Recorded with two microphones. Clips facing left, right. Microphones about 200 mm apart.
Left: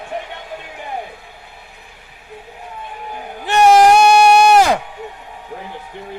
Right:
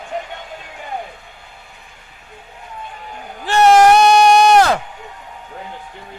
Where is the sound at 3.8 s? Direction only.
10° left (ahead or behind).